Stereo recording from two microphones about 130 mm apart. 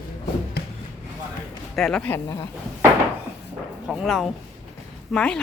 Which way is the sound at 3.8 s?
5° right (ahead or behind).